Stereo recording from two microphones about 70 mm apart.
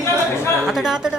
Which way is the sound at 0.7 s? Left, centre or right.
Centre.